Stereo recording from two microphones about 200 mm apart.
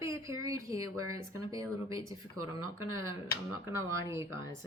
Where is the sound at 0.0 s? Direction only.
15° right (ahead or behind).